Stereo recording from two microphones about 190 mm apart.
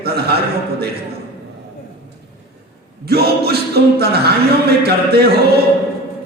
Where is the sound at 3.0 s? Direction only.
55° right (ahead or behind).